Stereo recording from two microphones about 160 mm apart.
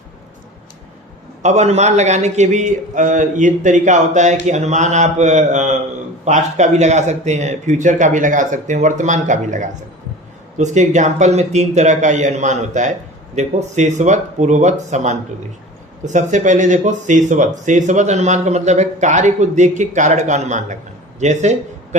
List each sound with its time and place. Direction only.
1.4 s a man's voice: 45° right (ahead or behind)